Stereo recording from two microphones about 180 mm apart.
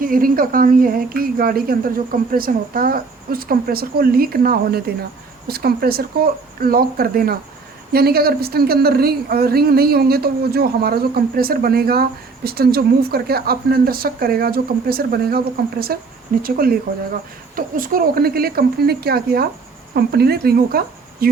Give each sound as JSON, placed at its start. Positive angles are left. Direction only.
{"t": 0.0, "sound": "a woman's voice", "side_deg": -50}